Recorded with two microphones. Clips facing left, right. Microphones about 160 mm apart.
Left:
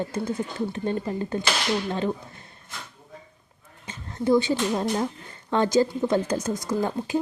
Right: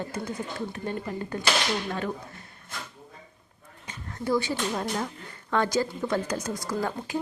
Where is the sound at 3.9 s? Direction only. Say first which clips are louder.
Left 6 dB; 20° left (ahead or behind).